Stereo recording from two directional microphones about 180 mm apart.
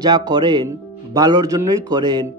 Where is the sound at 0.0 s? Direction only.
20° right (ahead or behind).